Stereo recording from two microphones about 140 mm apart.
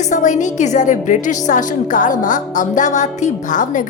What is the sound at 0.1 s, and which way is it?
A woman's voice, 60° left (ahead or behind).